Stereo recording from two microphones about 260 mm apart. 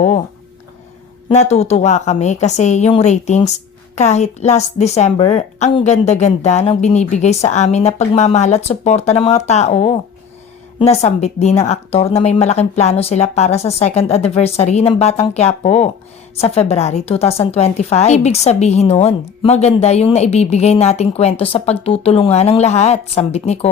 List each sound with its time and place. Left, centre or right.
1.3 s a woman's voice: left